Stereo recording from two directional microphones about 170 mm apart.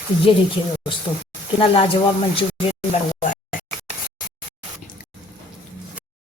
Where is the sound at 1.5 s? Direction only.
30° left (ahead or behind).